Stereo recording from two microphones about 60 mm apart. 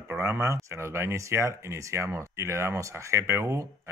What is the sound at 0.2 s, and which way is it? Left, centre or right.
Speech, right.